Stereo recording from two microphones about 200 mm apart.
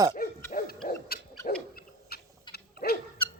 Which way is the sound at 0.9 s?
50° left (ahead or behind).